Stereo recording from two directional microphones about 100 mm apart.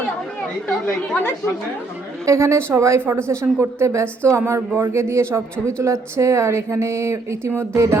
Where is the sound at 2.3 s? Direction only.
30° right (ahead or behind).